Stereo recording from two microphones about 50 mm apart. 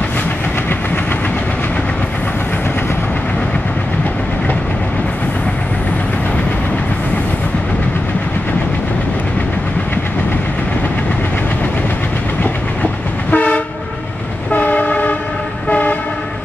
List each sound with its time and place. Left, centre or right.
13.3 s train: left